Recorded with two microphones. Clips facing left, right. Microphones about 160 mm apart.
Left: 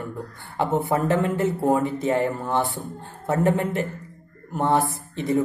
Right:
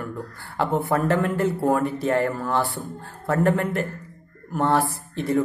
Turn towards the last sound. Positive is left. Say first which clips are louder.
# even
turn(degrees=20)  # may be behind; listen again after turning